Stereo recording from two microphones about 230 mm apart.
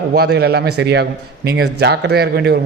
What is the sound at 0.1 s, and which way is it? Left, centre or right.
A man's voice, right.